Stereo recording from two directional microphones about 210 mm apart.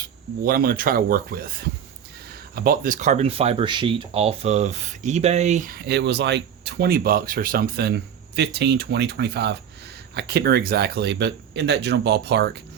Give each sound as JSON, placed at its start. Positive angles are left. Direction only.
{"t": 0.4, "sound": "speech", "side_deg": -45}